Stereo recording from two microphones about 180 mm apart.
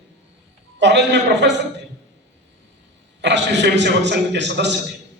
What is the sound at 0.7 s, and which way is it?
Speech, 75° right (ahead or behind).